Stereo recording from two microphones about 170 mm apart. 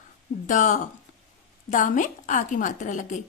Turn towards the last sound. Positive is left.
turn(degrees=50)  # may be behind; listen again after turning